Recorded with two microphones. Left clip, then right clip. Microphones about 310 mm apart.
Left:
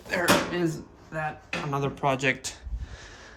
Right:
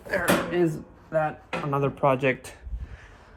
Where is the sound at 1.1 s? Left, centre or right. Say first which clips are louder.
Right 6 dB; centre.